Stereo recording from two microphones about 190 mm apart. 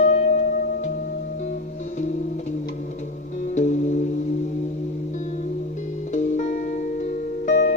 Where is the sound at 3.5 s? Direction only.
40° left (ahead or behind).